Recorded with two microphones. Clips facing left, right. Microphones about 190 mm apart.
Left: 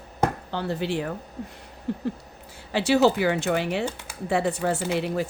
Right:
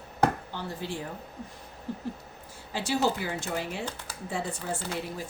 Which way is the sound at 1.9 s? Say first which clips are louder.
Left 7 dB; 70° left (ahead or behind).